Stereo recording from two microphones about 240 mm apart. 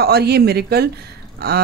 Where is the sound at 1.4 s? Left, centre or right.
Right.